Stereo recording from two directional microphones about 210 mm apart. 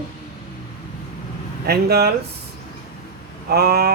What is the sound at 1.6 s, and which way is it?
Speech, 50° right (ahead or behind).